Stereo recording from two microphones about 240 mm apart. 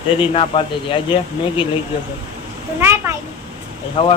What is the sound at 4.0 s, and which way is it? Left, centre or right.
Speech, left.